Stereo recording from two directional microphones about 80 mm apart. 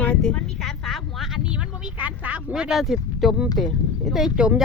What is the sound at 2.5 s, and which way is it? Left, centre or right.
Speech, centre.